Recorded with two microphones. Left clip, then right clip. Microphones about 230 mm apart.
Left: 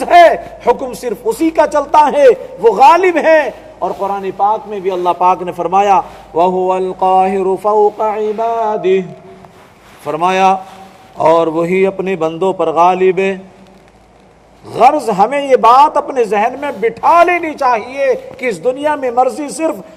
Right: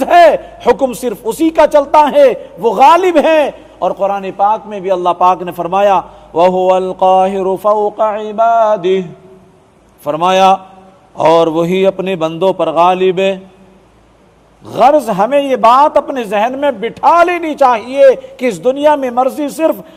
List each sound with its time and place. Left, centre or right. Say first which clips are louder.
0.0 s a sound: even; right
1.0 s a man's voice: right 1 dB; right
14.7 s a man's voice: right 1 dB; right